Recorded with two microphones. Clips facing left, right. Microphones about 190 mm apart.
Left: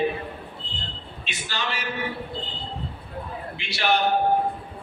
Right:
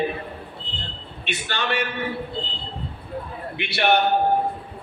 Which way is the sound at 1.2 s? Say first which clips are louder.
Right 5 dB; 60° right (ahead or behind).